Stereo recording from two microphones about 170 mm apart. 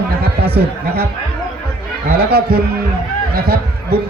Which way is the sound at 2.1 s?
65° right (ahead or behind).